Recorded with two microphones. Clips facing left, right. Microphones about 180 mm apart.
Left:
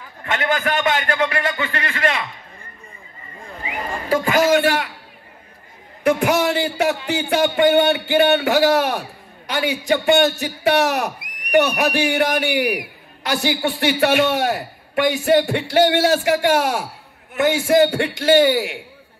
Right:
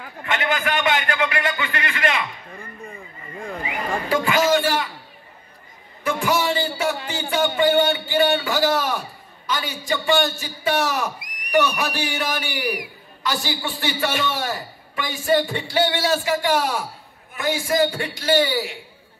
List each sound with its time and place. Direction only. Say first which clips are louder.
0.2 s a man's voice: left 2 dB; 40° left (ahead or behind)
4.1 s a man's voice: left 4 dB; 45° left (ahead or behind)
4.5 s a man's voice: left 3 dB; 65° left (ahead or behind)
6.0 s a sound: left 5 dB; 65° left (ahead or behind)
7.1 s a man's voice: left 4 dB; 65° left (ahead or behind)